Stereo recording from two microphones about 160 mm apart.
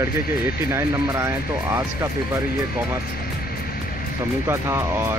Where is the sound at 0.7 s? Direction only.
20° right (ahead or behind).